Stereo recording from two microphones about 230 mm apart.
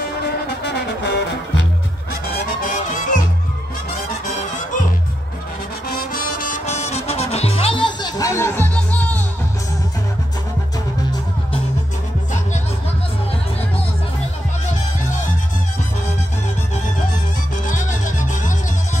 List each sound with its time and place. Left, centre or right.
0.0 s brass instrument: left
2.6 s music: left
5.9 s music: left; by 9.2 s centre
17.6 s music: left